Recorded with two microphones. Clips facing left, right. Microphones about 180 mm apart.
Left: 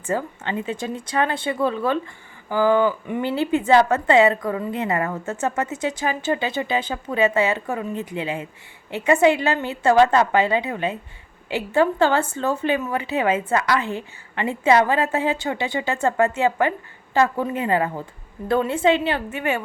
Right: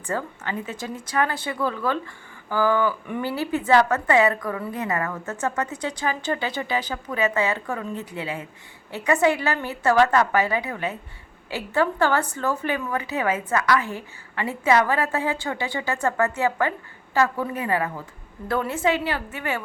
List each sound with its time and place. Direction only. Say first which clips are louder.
0.1 s speech: left 3 dB; 20° left (ahead or behind)